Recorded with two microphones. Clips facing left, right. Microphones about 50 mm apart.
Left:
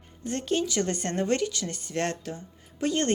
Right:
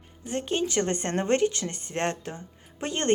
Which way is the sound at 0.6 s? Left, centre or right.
Right.